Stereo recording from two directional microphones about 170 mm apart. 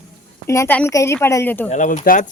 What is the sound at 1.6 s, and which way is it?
Speech, 45° left (ahead or behind).